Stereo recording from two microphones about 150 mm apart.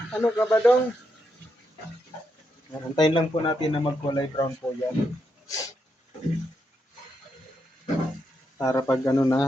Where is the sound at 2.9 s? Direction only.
35° left (ahead or behind).